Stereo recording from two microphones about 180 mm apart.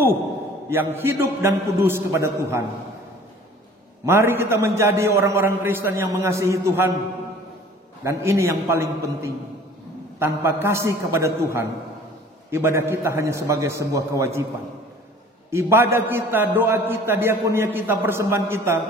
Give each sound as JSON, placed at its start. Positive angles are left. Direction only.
{"t": 0.7, "sound": "a man's voice", "side_deg": -15}
{"t": 4.0, "sound": "a man's voice", "side_deg": -15}
{"t": 8.0, "sound": "a man's voice", "side_deg": -15}
{"t": 15.5, "sound": "a man's voice", "side_deg": -15}